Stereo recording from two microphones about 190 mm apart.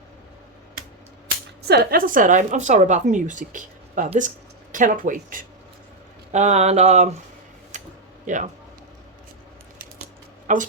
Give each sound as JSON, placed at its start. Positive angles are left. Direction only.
{"t": 1.6, "sound": "a woman's voice", "side_deg": -55}
{"t": 7.7, "sound": "a sound", "side_deg": -40}
{"t": 8.3, "sound": "a woman's voice", "side_deg": -40}
{"t": 10.4, "sound": "speech", "side_deg": -40}